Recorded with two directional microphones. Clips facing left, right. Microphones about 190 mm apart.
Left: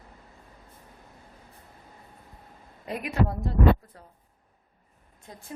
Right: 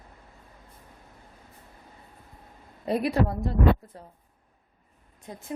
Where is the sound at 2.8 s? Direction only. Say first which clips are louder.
Right 8 dB; 35° right (ahead or behind).